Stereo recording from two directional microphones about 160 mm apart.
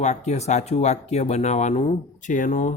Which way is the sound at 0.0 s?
45° left (ahead or behind).